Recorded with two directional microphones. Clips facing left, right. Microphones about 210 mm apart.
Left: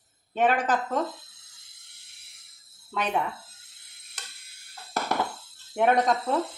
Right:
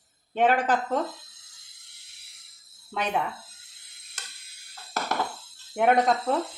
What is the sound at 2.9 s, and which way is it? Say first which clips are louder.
Speech: even; 10° right (ahead or behind).